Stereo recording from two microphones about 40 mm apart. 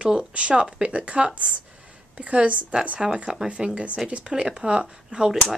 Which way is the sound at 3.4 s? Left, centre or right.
Right.